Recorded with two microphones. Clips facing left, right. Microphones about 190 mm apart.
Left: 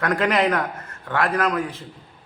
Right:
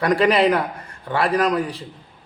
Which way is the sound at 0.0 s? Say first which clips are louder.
Right 4 dB; 15° right (ahead or behind).